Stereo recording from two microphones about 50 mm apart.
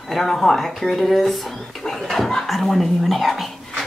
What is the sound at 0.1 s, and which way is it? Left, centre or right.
Speech, centre.